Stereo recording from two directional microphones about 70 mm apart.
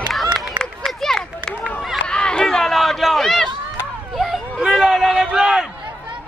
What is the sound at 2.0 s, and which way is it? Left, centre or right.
Run, centre.